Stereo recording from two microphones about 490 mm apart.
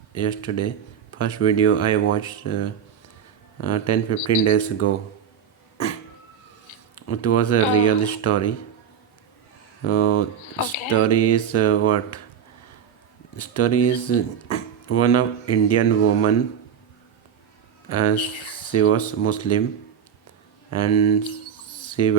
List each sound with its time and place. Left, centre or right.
0.1 s speech: left
6.9 s speech: left
9.8 s speech: left
13.3 s speech: left
17.8 s speech: left
20.7 s a sound: left